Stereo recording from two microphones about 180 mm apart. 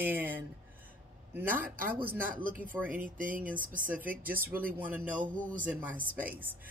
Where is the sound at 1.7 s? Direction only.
55° right (ahead or behind).